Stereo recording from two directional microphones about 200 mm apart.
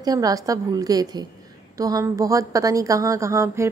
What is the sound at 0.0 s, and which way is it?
Speech, 20° right (ahead or behind).